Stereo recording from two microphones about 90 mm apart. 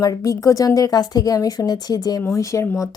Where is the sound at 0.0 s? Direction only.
40° left (ahead or behind).